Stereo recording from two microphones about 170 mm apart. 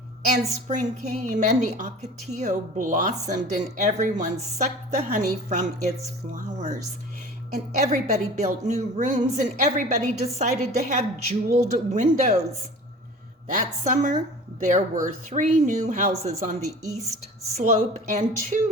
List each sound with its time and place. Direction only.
0.7 s a woman's voice: 45° right (ahead or behind)
13.8 s speech: 45° right (ahead or behind)